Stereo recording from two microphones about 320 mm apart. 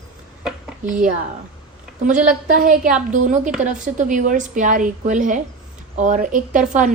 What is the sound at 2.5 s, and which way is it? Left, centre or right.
A woman's voice, right.